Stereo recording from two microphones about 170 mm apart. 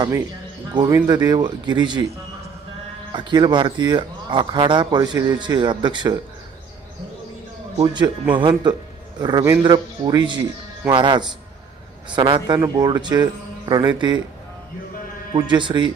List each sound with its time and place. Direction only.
0.7 s speech: 25° right (ahead or behind)
3.1 s speech: 25° right (ahead or behind)
7.8 s speech: 25° right (ahead or behind)
15.3 s speech: 25° right (ahead or behind)